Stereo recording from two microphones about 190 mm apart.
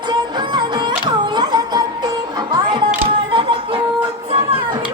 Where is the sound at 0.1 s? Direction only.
25° right (ahead or behind).